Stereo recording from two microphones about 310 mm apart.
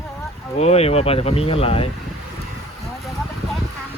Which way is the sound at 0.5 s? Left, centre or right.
Left.